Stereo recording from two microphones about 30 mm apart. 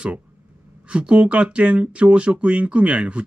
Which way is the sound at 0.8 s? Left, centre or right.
Right.